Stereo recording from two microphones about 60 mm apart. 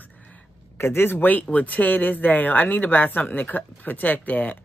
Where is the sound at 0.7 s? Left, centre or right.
Left.